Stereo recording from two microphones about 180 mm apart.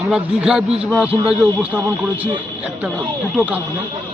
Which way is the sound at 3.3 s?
10° right (ahead or behind).